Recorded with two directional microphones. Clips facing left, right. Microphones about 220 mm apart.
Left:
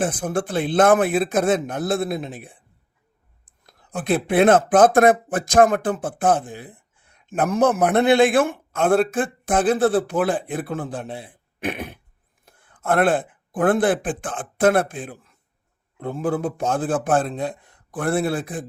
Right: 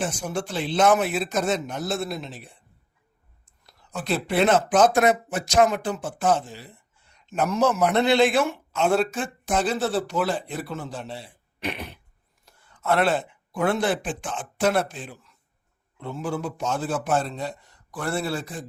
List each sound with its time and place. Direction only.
0.0 s speech: 55° left (ahead or behind)